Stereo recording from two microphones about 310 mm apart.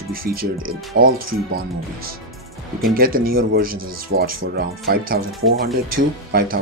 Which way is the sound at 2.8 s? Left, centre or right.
Right.